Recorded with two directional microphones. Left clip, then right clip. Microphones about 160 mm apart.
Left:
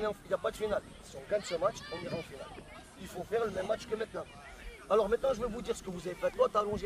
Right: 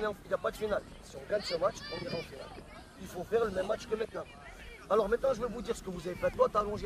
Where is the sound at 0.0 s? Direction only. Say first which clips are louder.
Even; 5° left (ahead or behind).